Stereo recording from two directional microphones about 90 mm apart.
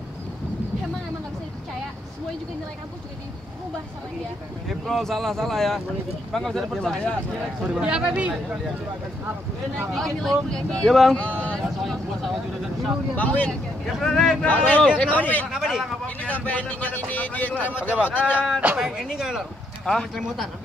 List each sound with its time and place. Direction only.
4.6 s speech: 5° left (ahead or behind)
7.8 s speech: 10° right (ahead or behind)
9.9 s speech: 5° left (ahead or behind)
11.1 s speech: 15° left (ahead or behind)
11.8 s speech: centre (ahead or behind)
13.1 s speech: 20° left (ahead or behind)
13.5 s speech: centre (ahead or behind)
14.4 s speech: 15° left (ahead or behind)
15.5 s speech: centre (ahead or behind)
16.3 s speech: 20° left (ahead or behind)
18.5 s speech: 10° right (ahead or behind)
19.8 s speech: 10° left (ahead or behind)